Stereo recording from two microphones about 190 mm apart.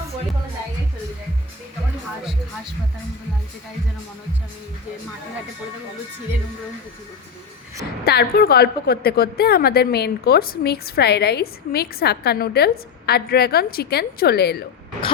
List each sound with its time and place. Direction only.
8.0 s a woman's voice: 55° left (ahead or behind)